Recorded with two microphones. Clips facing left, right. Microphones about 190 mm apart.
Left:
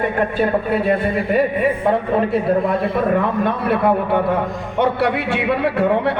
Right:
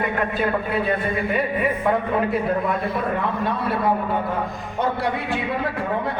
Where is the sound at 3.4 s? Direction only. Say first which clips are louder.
Left 5 dB; 60° left (ahead or behind).